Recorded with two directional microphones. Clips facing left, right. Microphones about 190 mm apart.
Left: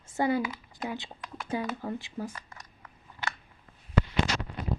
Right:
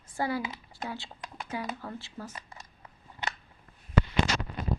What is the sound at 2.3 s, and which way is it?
Scissors, 25° right (ahead or behind).